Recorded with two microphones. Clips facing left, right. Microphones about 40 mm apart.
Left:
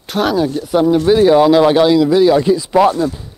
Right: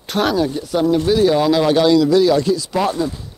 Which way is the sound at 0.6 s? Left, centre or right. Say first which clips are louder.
Left 6 dB; centre.